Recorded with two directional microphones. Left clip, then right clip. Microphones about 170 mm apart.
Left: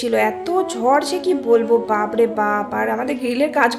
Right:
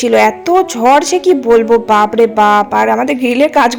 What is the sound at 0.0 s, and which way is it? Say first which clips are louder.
Speech: right 9 dB; 35° right (ahead or behind).